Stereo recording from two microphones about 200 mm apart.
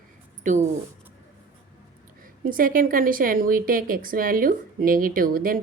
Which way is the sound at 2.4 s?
45° right (ahead or behind).